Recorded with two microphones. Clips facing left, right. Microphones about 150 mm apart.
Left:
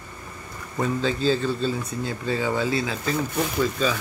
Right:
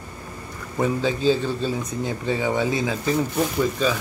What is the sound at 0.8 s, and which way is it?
Speech, 15° right (ahead or behind).